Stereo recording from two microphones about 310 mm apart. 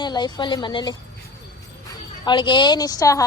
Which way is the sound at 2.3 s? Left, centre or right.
Centre.